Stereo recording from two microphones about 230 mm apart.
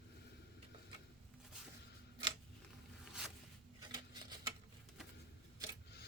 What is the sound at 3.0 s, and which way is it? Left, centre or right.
Zipper, centre.